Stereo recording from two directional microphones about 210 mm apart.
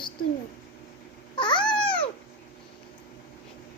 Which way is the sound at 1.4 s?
20° left (ahead or behind).